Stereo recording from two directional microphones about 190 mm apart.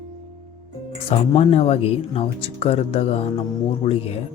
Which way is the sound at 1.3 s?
35° left (ahead or behind).